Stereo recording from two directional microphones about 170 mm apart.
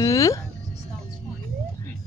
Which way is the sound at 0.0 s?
20° left (ahead or behind).